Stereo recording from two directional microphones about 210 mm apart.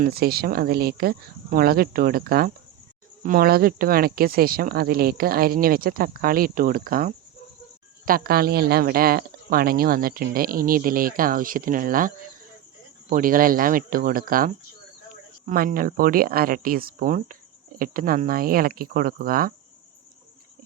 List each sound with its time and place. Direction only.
0.0 s speech: 45° right (ahead or behind)